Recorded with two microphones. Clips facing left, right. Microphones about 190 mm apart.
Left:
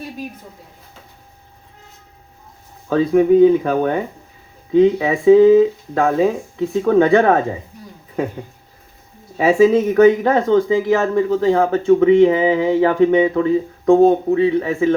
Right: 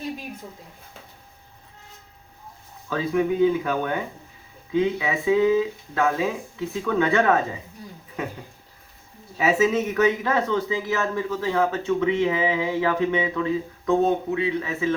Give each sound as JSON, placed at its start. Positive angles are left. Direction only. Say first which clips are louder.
{"t": 2.9, "sound": "speech", "louder": "left 10 dB", "side_deg": 40}
{"t": 9.5, "sound": "speech", "louder": "left 9 dB", "side_deg": 40}